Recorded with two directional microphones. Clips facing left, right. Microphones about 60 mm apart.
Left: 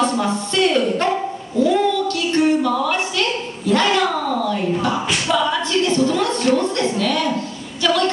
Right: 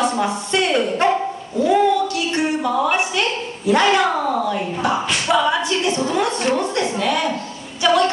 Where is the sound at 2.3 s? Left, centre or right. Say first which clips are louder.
Left 7 dB; right.